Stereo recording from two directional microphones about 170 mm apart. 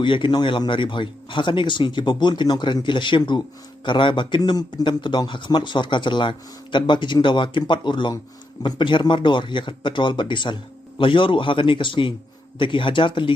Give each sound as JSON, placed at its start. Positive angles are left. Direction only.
{"t": 0.0, "sound": "a man's voice", "side_deg": 30}